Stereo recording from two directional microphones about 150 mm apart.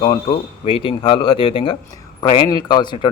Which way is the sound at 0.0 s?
30° left (ahead or behind).